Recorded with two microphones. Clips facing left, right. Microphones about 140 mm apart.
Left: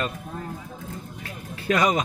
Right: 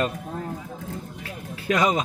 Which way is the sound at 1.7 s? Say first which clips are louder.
Even; 20° right (ahead or behind).